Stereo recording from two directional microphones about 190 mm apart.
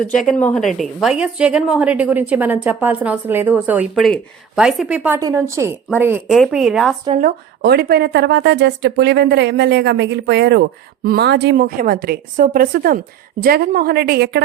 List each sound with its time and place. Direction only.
0.2 s a woman's voice: 5° left (ahead or behind); by 6.3 s 10° right (ahead or behind)
6.3 s a woman's voice: centre (ahead or behind)
7.1 s a woman's voice: 45° right (ahead or behind)